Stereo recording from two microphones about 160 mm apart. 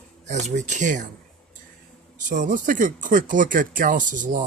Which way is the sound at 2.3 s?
55° right (ahead or behind).